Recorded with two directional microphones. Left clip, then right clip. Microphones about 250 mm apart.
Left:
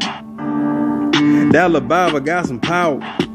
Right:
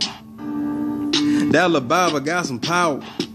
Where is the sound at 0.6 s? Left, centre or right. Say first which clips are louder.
Left 6 dB; left.